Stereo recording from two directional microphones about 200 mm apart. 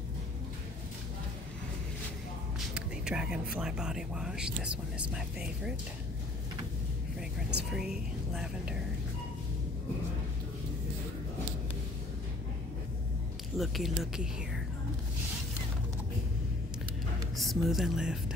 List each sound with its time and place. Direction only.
2.7 s a sound: 5° right (ahead or behind)
3.5 s speech: 5° right (ahead or behind)
7.7 s speech: 5° right (ahead or behind)
13.6 s speech: centre (ahead or behind)
17.4 s speech: centre (ahead or behind)